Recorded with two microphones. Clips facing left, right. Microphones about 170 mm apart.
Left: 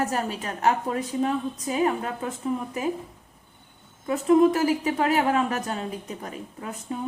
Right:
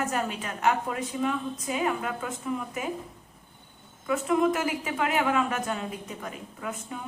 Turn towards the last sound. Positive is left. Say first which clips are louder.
# left 2 dB
turn(degrees=35)  # may be behind; listen again after turning